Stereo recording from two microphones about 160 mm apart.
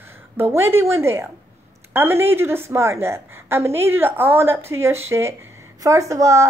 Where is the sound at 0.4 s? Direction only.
15° right (ahead or behind).